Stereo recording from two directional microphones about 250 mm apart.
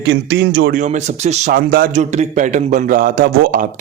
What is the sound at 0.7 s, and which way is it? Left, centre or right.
Speech, right.